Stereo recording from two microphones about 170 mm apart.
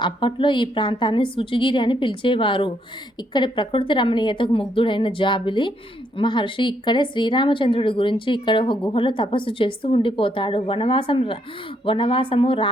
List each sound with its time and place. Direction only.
0.0 s a woman's voice: 30° left (ahead or behind)